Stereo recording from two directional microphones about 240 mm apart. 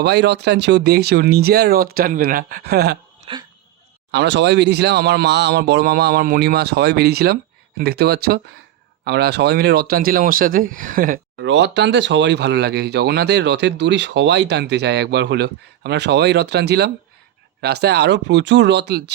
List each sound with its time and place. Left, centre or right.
0.0 s speech: right
4.1 s speech: right